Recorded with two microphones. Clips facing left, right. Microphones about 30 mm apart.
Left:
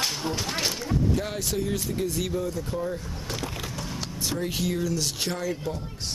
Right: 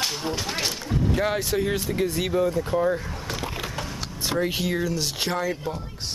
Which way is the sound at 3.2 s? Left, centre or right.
Centre.